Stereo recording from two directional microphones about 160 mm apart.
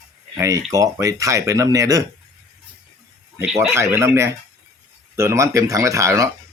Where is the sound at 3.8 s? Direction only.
15° right (ahead or behind).